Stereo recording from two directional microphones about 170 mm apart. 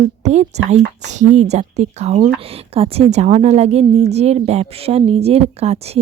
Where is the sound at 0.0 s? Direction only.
40° right (ahead or behind).